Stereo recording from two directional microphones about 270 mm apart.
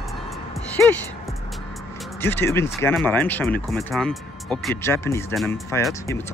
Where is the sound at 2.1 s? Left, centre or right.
Centre.